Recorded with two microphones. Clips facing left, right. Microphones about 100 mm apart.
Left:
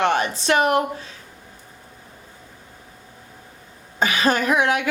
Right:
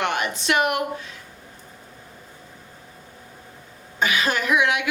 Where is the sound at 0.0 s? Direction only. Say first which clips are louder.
Left 4 dB; 35° left (ahead or behind).